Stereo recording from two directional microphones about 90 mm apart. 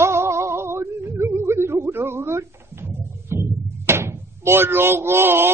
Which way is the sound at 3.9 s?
30° right (ahead or behind).